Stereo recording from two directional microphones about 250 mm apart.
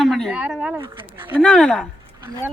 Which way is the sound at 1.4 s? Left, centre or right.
Centre.